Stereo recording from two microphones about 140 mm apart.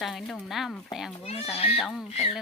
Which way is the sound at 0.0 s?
Centre (ahead or behind).